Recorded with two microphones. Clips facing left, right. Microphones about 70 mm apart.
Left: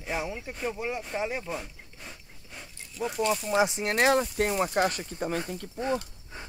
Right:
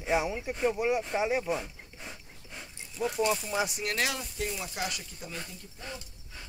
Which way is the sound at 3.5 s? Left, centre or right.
Left.